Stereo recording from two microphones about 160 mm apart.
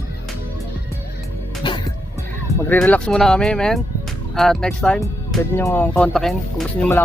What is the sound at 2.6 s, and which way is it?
Speech, 10° left (ahead or behind).